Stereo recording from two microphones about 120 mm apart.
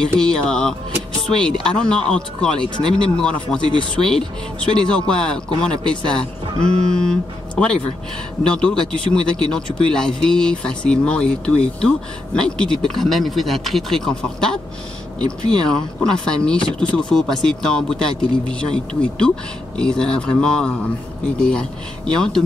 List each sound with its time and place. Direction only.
0.2 s speech: 5° left (ahead or behind)
15.7 s speech: 5° left (ahead or behind)
16.5 s speech: 45° left (ahead or behind)
16.9 s speech: 5° left (ahead or behind)